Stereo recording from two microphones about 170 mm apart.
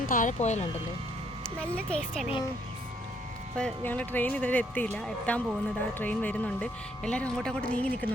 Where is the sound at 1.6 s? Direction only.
5° left (ahead or behind).